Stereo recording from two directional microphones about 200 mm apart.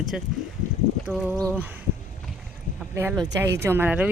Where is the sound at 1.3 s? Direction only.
15° right (ahead or behind).